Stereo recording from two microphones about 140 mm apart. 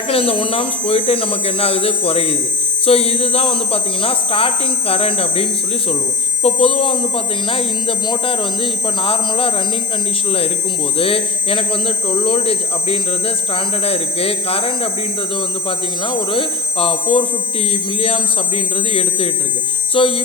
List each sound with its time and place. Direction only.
0.1 s a man's voice: 40° left (ahead or behind)
10.9 s a man's voice: 40° left (ahead or behind)
16.0 s a man's voice: 40° left (ahead or behind)